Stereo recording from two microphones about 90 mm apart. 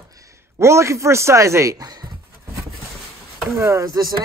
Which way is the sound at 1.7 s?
45° right (ahead or behind).